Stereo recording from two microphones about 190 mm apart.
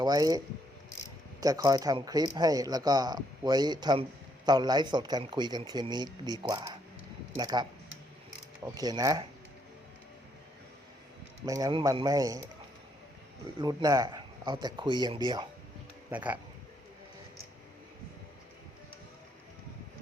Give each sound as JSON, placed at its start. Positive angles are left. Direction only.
{"t": 0.0, "sound": "speech", "side_deg": -20}
{"t": 11.4, "sound": "speech", "side_deg": -20}
{"t": 13.6, "sound": "speech", "side_deg": -20}
{"t": 16.0, "sound": "speech", "side_deg": -10}